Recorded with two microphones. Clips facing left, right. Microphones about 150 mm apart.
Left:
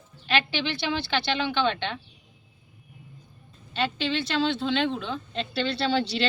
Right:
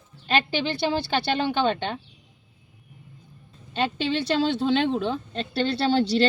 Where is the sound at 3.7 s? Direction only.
45° right (ahead or behind).